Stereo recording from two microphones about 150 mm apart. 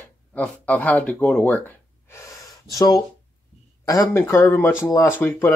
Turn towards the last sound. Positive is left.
turn(degrees=15)  # may be behind; listen again after turning